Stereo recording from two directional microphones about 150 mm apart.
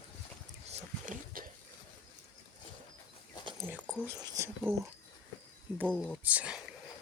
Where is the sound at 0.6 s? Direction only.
45° right (ahead or behind).